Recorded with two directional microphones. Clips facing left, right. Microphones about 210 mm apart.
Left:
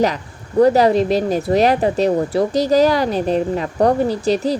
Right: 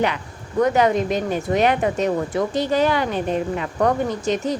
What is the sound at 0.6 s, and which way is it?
A woman's voice, 35° left (ahead or behind).